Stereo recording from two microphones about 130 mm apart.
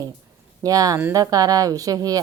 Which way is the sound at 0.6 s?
30° right (ahead or behind).